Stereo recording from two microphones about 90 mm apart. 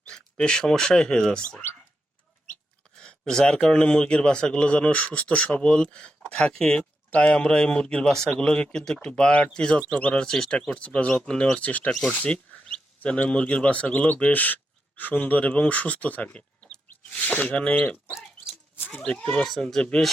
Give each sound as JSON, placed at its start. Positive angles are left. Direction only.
{"t": 0.1, "sound": "speech", "side_deg": 10}
{"t": 3.0, "sound": "a man's voice", "side_deg": 10}